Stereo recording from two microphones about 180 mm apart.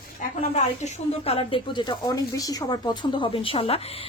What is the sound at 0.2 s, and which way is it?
Speech, 40° left (ahead or behind).